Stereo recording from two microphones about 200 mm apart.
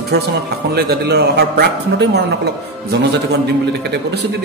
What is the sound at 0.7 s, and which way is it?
A man's voice, 55° right (ahead or behind).